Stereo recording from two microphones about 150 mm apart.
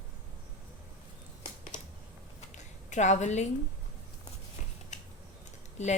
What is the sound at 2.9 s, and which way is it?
Speech, 50° left (ahead or behind).